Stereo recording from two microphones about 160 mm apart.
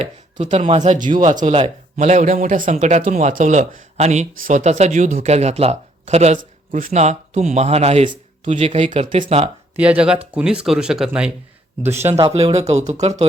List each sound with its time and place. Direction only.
0.0 s speech: 45° right (ahead or behind)
9.7 s speech: 10° right (ahead or behind)
11.8 s speech: 15° right (ahead or behind)
12.3 s speech: 40° right (ahead or behind)